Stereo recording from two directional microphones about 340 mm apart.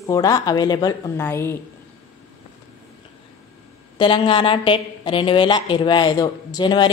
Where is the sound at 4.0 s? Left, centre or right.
Centre.